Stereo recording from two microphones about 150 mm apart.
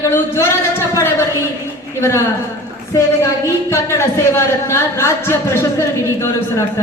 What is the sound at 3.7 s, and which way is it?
Speech, 20° left (ahead or behind).